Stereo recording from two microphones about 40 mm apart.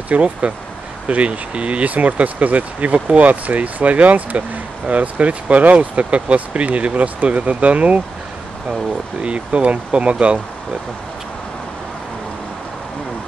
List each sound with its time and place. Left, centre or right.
0.1 s speech: right
9.2 s speech: right